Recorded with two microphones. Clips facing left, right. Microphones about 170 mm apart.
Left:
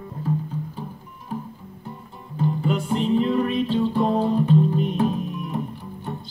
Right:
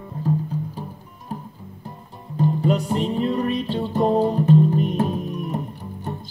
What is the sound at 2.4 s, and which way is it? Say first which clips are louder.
Music: right 3 dB; 40° right (ahead or behind).